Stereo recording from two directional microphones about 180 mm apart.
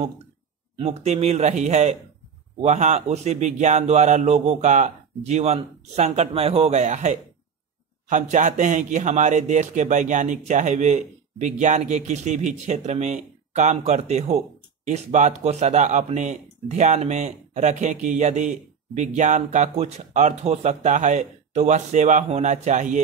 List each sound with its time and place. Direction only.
0.7 s speech: 35° right (ahead or behind)